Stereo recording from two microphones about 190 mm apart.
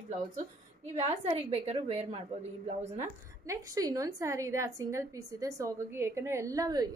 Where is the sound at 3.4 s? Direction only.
20° right (ahead or behind).